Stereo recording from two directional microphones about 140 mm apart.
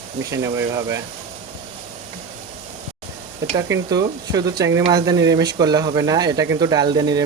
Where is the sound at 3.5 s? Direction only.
25° right (ahead or behind).